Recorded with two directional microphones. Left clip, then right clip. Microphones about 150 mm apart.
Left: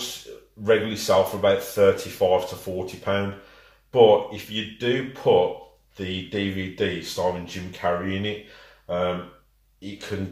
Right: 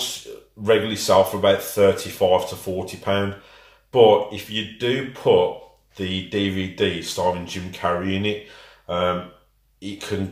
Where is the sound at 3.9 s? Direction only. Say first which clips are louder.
Right 2 dB; 10° right (ahead or behind).